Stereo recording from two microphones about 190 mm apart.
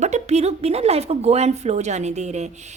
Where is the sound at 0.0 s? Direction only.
35° right (ahead or behind).